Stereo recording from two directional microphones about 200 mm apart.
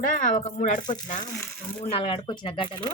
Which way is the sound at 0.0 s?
40° left (ahead or behind).